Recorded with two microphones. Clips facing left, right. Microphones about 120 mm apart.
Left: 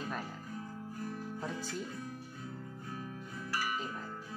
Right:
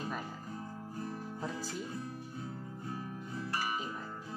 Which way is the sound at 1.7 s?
30° right (ahead or behind).